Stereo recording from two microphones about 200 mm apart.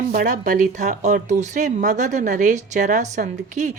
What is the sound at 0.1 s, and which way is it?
Speech, 40° right (ahead or behind).